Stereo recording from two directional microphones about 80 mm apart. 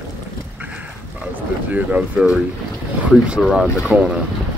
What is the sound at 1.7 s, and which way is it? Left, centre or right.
Speech, centre.